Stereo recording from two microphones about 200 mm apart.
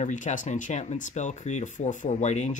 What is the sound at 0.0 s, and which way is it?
Speech, 40° left (ahead or behind).